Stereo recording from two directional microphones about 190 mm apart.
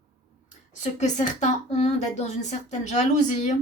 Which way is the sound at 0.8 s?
40° left (ahead or behind).